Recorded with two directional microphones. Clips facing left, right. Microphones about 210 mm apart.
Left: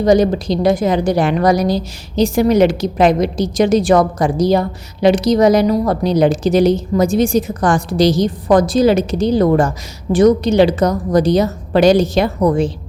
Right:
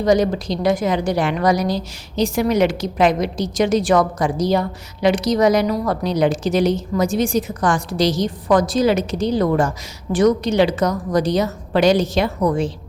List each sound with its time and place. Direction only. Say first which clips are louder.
0.0 s a woman's voice: left 4 dB; 30° left (ahead or behind)